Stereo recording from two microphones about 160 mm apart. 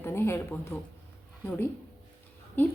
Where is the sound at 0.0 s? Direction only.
15° left (ahead or behind).